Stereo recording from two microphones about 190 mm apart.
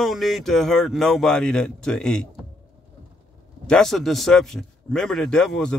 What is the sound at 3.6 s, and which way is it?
Speech, centre (ahead or behind).